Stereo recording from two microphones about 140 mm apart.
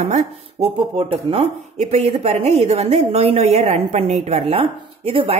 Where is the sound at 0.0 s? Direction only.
55° right (ahead or behind).